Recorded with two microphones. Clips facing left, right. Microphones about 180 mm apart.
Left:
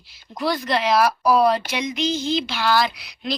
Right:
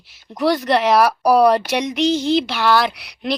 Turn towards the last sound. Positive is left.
turn(degrees=-65)  # may be behind; listen again after turning